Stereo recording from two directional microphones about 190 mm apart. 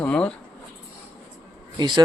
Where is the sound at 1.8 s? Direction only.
25° right (ahead or behind).